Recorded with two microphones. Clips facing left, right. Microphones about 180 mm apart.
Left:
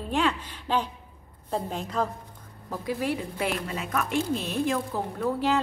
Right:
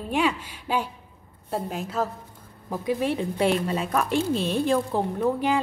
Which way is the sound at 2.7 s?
20° right (ahead or behind).